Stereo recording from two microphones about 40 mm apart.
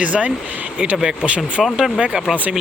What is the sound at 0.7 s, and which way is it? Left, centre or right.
Speech, right.